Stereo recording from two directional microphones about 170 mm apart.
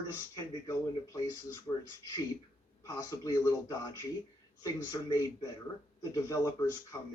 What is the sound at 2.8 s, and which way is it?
Speech, 20° left (ahead or behind).